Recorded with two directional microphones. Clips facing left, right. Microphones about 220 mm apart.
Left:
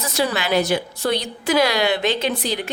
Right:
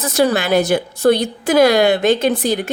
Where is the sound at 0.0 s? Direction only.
50° right (ahead or behind).